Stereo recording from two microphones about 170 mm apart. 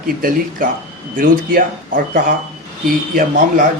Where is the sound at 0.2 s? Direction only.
55° right (ahead or behind).